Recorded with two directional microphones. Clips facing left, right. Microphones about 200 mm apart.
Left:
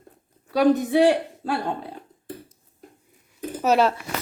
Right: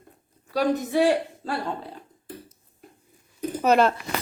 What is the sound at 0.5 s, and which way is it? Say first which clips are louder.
Speech: left 5 dB; 65° left (ahead or behind).